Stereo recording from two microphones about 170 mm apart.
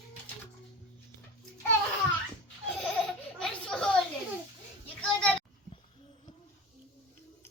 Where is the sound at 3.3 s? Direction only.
5° left (ahead or behind).